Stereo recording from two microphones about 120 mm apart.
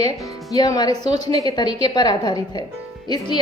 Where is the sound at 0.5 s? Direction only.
35° left (ahead or behind).